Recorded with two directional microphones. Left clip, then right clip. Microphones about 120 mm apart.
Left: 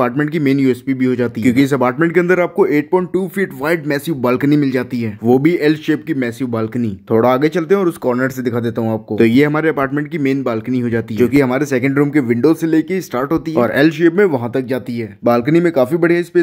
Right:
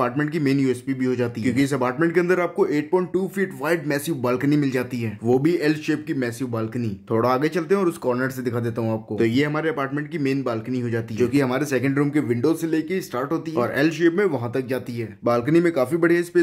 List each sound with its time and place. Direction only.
0.0 s speech: 35° left (ahead or behind)
1.4 s speech: 50° left (ahead or behind); by 16.3 s 35° left (ahead or behind)